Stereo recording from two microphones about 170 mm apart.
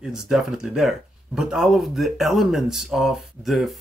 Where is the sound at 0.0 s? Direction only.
5° right (ahead or behind).